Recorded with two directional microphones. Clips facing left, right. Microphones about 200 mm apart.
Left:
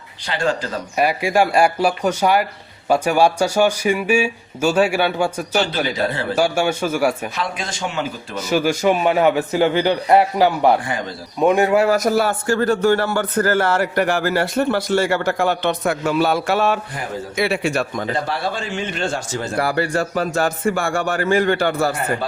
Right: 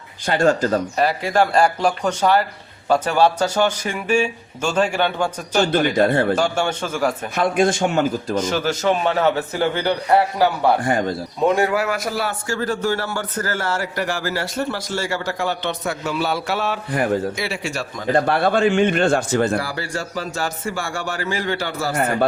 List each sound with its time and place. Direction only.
0.3 s a man's voice: 45° right (ahead or behind)
0.9 s speech: 10° left (ahead or behind)
7.3 s a man's voice: 55° right (ahead or behind)
8.4 s speech: 10° left (ahead or behind)
11.9 s speech: 45° left (ahead or behind); by 18.0 s 60° left (ahead or behind)
18.3 s a man's voice: 55° right (ahead or behind)
19.5 s speech: 60° left (ahead or behind)